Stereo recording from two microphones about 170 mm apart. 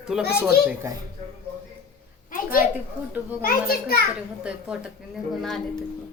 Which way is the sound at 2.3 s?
55° left (ahead or behind).